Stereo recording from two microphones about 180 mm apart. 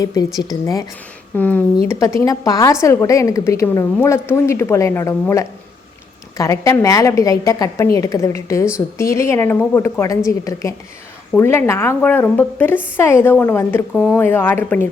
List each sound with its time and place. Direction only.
0.0 s a woman's voice: 20° left (ahead or behind)